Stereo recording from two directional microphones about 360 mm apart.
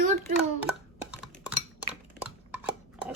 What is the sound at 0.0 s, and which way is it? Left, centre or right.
Hands, right.